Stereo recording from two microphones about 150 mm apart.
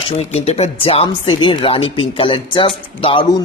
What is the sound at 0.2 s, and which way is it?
Speech, 45° left (ahead or behind).